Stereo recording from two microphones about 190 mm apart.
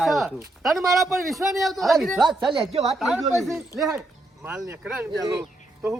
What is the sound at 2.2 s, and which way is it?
Speech, 20° right (ahead or behind).